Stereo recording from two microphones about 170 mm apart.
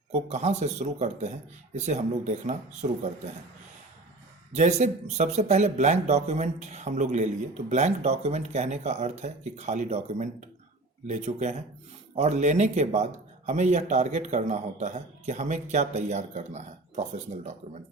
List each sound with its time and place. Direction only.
0.1 s speech: 40° right (ahead or behind)
4.5 s speech: 45° right (ahead or behind)